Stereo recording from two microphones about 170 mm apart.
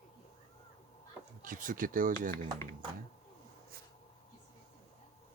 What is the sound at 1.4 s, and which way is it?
Speech, 50° right (ahead or behind).